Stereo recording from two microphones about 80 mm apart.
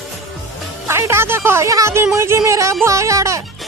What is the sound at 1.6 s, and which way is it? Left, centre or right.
Speech, right.